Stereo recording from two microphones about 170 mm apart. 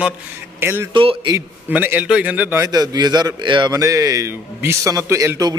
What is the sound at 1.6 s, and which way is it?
A man's voice, 10° right (ahead or behind).